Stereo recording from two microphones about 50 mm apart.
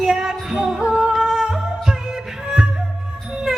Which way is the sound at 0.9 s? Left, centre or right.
Centre.